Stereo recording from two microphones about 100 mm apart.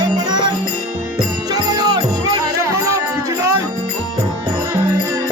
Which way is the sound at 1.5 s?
40° right (ahead or behind).